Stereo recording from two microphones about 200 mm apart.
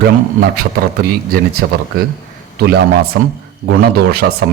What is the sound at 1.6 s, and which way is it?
Speech, 60° right (ahead or behind).